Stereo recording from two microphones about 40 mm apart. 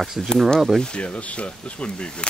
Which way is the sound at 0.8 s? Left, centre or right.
Left.